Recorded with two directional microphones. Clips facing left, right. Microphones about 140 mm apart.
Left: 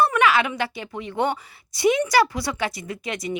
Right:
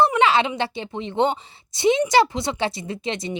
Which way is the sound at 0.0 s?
25° right (ahead or behind).